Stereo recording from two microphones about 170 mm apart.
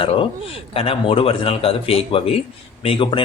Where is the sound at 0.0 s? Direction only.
30° left (ahead or behind).